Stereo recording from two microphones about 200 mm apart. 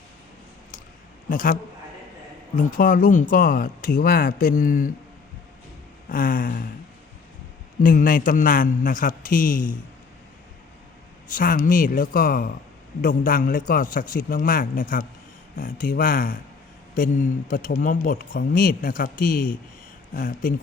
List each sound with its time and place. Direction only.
1.3 s a woman's voice: 40° left (ahead or behind)
2.6 s speech: 40° left (ahead or behind)
6.1 s speech: 45° left (ahead or behind)
7.8 s speech: 45° left (ahead or behind)
11.3 s speech: 45° left (ahead or behind)